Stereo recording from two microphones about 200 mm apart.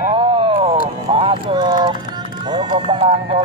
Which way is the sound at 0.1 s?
25° right (ahead or behind).